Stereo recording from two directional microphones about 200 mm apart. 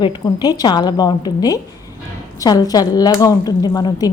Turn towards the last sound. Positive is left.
turn(degrees=20)  # may be behind; listen again after turning